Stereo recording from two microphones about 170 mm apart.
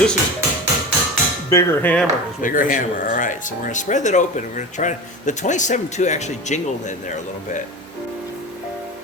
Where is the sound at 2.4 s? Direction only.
55° left (ahead or behind).